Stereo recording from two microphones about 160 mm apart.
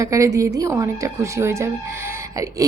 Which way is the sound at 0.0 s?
20° right (ahead or behind).